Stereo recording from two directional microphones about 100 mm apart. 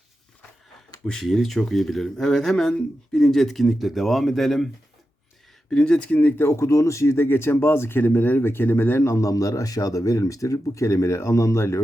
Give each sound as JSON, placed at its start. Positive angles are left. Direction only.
{"t": 1.0, "sound": "speech", "side_deg": 0}
{"t": 5.7, "sound": "speech", "side_deg": 10}
{"t": 6.5, "sound": "speech", "side_deg": 30}